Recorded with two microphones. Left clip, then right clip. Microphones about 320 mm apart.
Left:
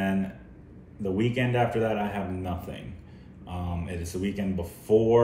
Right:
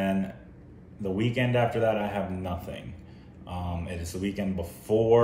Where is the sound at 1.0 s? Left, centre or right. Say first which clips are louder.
Left 1 dB; centre.